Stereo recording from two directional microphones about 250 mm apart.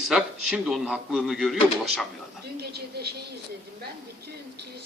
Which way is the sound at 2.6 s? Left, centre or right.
Right.